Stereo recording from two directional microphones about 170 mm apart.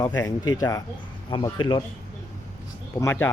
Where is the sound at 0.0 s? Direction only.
20° left (ahead or behind).